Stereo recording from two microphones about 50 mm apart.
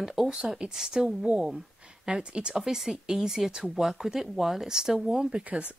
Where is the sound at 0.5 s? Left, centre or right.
Centre.